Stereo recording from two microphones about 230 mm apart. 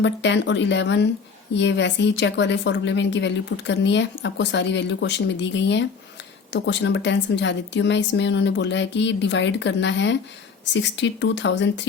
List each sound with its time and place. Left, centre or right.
0.0 s a woman's voice: left